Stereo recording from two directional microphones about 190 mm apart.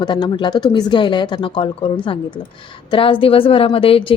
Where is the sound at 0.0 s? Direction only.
25° left (ahead or behind).